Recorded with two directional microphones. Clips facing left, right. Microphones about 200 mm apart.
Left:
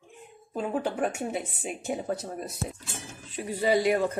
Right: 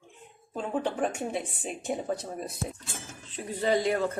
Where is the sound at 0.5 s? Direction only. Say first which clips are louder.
Left 1 dB; 5° left (ahead or behind).